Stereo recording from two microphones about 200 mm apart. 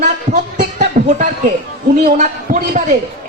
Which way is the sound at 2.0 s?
40° right (ahead or behind).